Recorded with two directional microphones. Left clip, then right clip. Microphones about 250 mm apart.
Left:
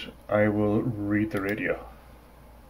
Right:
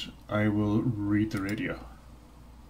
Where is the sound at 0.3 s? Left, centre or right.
Centre.